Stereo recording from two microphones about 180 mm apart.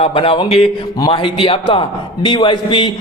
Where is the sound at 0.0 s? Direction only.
30° left (ahead or behind).